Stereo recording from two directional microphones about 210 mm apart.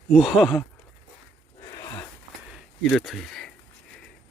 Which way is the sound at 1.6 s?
15° left (ahead or behind).